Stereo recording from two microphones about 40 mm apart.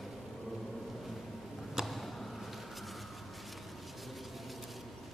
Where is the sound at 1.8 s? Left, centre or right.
Centre.